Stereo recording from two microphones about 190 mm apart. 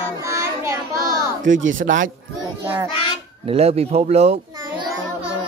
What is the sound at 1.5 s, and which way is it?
Speech, 85° right.